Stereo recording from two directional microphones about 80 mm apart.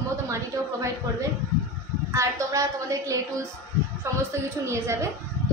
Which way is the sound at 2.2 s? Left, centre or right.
Right.